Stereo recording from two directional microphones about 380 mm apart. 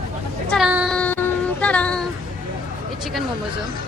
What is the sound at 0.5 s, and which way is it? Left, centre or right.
Child singing, centre.